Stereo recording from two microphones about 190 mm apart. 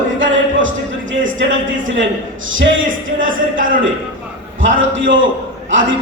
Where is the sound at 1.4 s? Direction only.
85° right.